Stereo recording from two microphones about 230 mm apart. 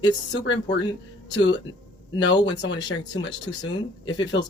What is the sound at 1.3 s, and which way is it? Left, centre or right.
Speech, left.